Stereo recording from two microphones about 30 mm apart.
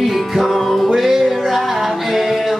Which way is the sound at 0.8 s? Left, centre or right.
Centre.